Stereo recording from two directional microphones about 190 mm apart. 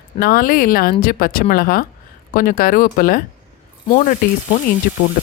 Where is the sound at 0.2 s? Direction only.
50° left (ahead or behind).